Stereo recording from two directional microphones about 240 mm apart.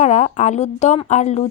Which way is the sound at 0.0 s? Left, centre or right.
Left.